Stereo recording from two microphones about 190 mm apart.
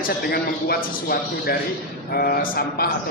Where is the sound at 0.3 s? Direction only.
55° left (ahead or behind).